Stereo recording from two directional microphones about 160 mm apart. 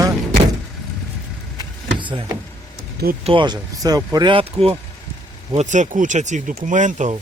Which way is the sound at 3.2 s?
30° right (ahead or behind).